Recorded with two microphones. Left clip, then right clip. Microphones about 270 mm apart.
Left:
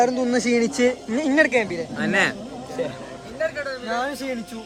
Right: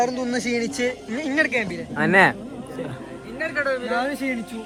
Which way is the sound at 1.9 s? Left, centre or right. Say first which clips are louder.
Right 5 dB; centre.